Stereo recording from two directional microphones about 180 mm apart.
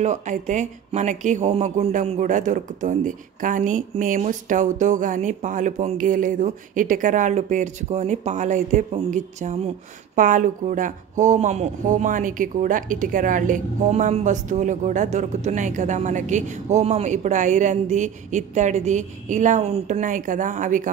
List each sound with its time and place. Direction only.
0.0 s speech: 40° right (ahead or behind)